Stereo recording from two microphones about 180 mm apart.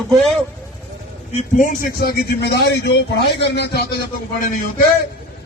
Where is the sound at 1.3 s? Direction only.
45° left (ahead or behind); by 4.0 s 65° left (ahead or behind).